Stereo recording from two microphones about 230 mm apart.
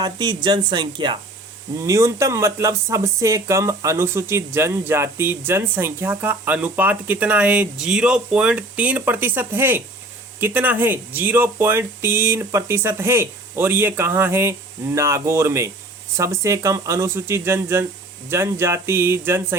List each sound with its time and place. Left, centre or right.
0.0 s speech: centre